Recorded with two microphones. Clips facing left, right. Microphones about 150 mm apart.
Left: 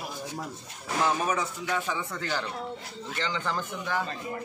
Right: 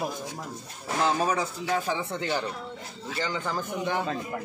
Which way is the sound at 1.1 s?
30° right (ahead or behind).